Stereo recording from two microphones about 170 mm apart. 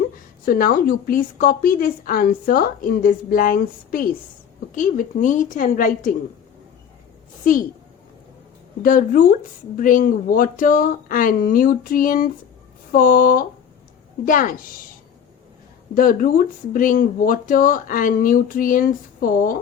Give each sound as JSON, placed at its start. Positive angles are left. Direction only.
{"t": 0.4, "sound": "a woman's voice", "side_deg": 60}
{"t": 7.4, "sound": "a woman's voice", "side_deg": 50}
{"t": 8.8, "sound": "a woman's voice", "side_deg": 55}
{"t": 16.0, "sound": "a woman's voice", "side_deg": 55}